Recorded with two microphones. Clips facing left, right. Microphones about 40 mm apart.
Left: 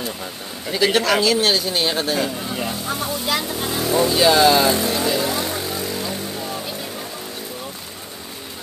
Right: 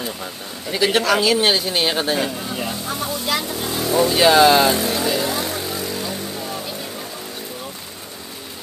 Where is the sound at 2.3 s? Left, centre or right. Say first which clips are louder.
Even; centre.